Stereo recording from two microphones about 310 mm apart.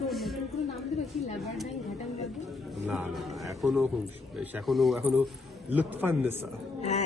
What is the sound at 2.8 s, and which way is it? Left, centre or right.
A man's voice, centre.